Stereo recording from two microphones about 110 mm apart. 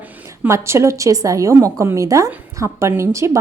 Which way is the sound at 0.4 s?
25° right (ahead or behind).